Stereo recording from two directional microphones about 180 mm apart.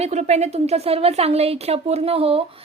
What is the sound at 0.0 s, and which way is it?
A woman's voice, 40° right (ahead or behind).